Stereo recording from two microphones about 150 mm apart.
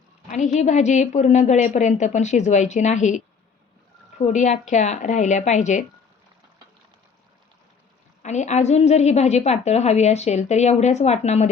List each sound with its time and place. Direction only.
0.3 s a woman's voice: 55° left (ahead or behind)
8.2 s a woman's voice: 50° left (ahead or behind)